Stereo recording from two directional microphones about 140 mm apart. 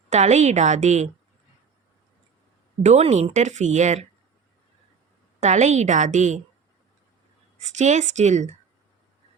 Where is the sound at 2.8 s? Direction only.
55° right (ahead or behind).